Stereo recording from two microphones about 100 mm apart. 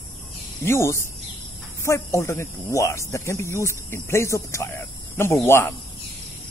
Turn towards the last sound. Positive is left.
turn(degrees=25)  # may be behind; listen again after turning